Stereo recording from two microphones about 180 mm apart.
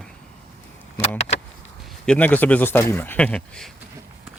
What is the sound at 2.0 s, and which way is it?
Speech, 10° left (ahead or behind).